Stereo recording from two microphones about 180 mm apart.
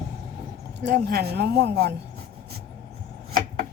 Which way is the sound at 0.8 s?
60° right (ahead or behind).